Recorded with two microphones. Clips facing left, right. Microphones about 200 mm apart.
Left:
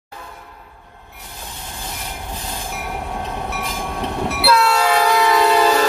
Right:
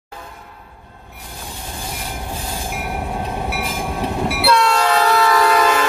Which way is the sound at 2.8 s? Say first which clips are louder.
Right 2 dB; 10° right (ahead or behind).